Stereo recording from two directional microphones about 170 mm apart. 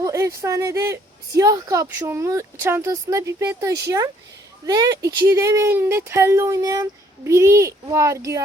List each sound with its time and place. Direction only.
0.0 s speech: 20° right (ahead or behind)